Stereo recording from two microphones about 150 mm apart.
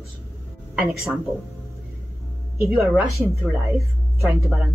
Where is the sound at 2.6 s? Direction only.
5° right (ahead or behind).